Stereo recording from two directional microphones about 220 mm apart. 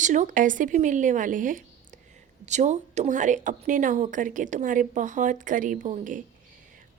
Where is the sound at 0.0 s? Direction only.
35° right (ahead or behind).